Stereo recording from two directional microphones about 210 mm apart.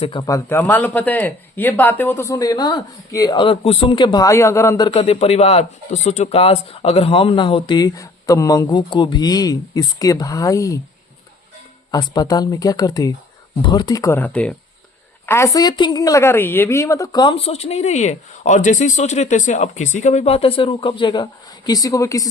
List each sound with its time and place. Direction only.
0.0 s speech: 20° left (ahead or behind)
11.9 s speech: 20° left (ahead or behind)